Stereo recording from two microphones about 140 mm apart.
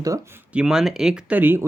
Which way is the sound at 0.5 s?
5° right (ahead or behind).